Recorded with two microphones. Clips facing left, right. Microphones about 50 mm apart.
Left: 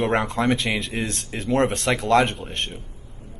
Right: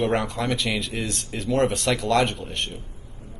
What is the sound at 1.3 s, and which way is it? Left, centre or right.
Speech, left.